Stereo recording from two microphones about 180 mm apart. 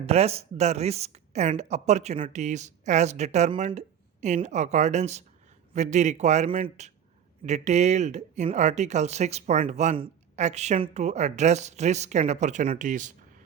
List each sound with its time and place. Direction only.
0.0 s speech: 35° right (ahead or behind)